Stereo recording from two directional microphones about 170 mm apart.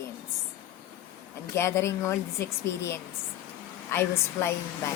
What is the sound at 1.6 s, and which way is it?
Speech, 15° left (ahead or behind).